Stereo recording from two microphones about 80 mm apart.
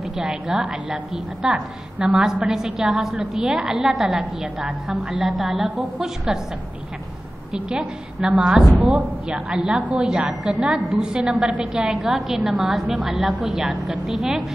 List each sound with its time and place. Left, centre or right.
0.2 s a woman's voice: centre
7.5 s a woman's voice: centre
10.0 s a woman's voice: centre